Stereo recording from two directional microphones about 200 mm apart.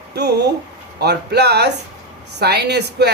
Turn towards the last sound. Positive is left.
turn(degrees=-55)  # may be behind; listen again after turning